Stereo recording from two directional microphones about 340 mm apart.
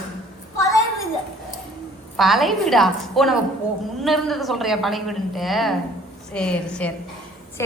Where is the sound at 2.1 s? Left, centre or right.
Centre.